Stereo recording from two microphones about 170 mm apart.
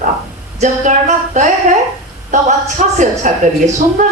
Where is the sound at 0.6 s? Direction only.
45° right (ahead or behind).